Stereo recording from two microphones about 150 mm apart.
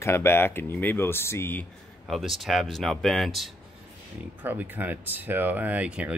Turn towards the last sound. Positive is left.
turn(degrees=-10)  # may be behind; listen again after turning